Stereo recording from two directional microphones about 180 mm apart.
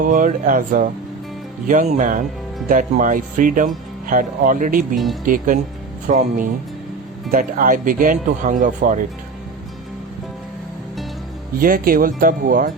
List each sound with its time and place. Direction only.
0.0 s speech: 45° right (ahead or behind)
11.6 s speech: 50° right (ahead or behind)